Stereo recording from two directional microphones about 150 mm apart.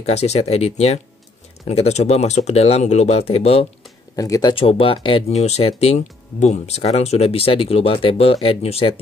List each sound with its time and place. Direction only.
0.0 s speech: 45° left (ahead or behind)
4.2 s speech: 25° left (ahead or behind)